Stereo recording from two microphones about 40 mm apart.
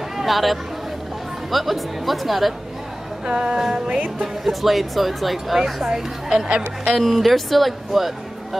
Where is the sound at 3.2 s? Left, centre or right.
Right.